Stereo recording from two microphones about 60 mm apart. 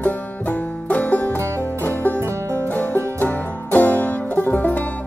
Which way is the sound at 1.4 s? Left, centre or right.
Right.